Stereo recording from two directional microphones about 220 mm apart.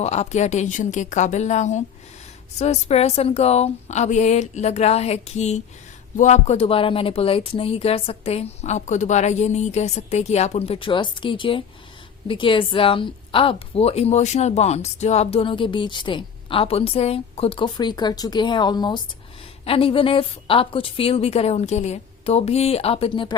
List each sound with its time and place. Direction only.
0.0 s a woman's voice: 30° left (ahead or behind)